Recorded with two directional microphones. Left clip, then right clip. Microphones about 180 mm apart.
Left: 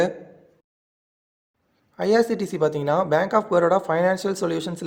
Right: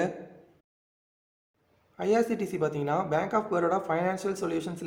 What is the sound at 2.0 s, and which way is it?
Speech, 35° left (ahead or behind).